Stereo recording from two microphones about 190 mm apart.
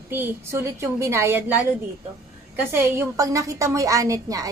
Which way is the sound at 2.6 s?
10° right (ahead or behind).